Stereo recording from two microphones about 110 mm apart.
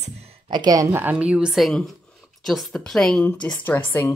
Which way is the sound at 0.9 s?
15° right (ahead or behind).